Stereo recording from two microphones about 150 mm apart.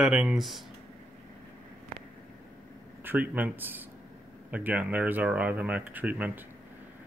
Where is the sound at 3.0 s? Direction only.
15° right (ahead or behind).